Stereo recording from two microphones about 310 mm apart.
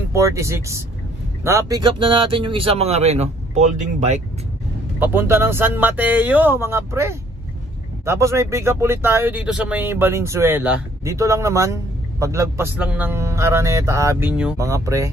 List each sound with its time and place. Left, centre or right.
0.1 s speech: centre
4.9 s speech: centre